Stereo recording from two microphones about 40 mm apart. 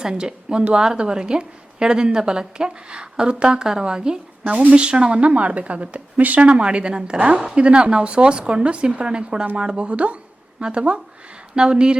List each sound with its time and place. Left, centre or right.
0.0 s a woman's voice: centre